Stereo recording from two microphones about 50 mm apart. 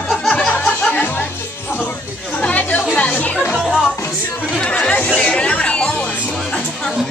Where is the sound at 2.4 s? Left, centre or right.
Left.